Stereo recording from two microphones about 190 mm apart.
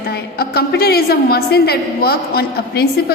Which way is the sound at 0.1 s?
55° left (ahead or behind).